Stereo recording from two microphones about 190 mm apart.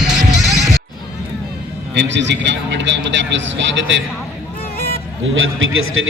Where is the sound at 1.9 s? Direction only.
70° right (ahead or behind).